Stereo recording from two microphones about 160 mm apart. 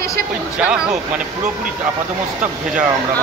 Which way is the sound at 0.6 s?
5° right (ahead or behind).